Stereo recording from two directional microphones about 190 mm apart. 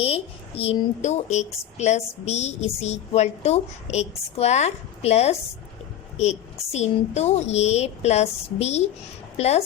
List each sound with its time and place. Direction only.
0.0 s speech: 30° left (ahead or behind)